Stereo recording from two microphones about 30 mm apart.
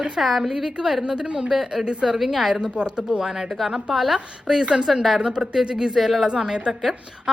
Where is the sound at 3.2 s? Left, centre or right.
Centre.